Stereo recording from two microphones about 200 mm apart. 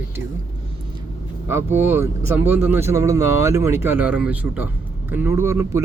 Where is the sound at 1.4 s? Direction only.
10° right (ahead or behind).